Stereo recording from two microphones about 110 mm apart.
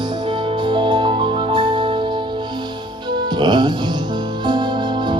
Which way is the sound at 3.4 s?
40° right (ahead or behind).